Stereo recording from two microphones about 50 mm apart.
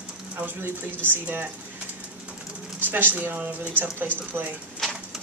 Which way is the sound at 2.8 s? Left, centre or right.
Right.